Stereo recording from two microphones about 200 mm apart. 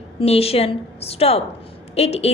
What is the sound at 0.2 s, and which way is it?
A woman's voice, 30° left (ahead or behind).